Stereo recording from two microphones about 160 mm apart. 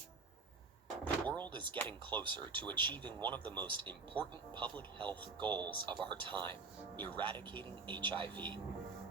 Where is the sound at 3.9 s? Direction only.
10° left (ahead or behind).